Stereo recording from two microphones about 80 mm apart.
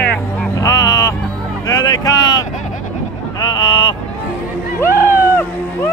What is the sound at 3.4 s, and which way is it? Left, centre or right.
Speech, left.